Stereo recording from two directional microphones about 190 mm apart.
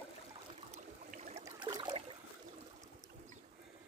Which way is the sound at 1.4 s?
15° right (ahead or behind).